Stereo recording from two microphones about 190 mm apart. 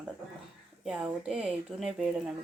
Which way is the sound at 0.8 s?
5° right (ahead or behind).